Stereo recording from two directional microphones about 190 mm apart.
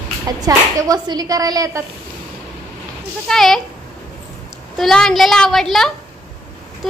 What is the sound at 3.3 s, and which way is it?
Speech, centre (ahead or behind).